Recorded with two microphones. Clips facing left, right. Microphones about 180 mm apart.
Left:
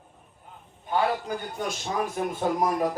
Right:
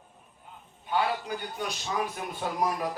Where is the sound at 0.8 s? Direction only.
45° left (ahead or behind).